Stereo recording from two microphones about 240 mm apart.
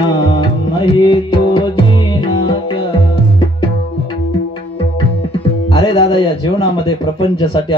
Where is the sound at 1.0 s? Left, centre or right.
Left.